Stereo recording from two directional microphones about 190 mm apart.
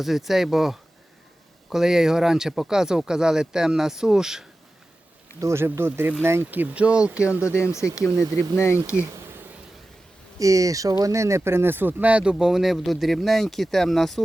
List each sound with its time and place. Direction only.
0.0 s speech: centre (ahead or behind)
5.4 s speech: 15° right (ahead or behind)
7.7 s speech: 15° left (ahead or behind)
8.9 s bee: 10° right (ahead or behind)
10.3 s speech: 15° right (ahead or behind); by 14.3 s centre (ahead or behind)